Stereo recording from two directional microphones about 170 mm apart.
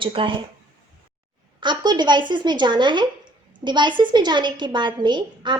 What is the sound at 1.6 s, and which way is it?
A woman's voice, 25° right (ahead or behind).